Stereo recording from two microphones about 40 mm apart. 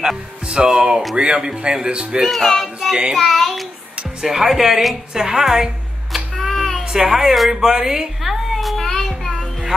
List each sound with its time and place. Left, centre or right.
0.0 s a woman's voice: centre
2.2 s music: centre
2.9 s a woman's voice: centre
3.2 s music: centre
4.2 s a woman's voice: centre
6.1 s a sound: centre
6.8 s a woman's voice: centre
8.2 s a sound: centre
8.8 s child singing: centre
9.4 s music: centre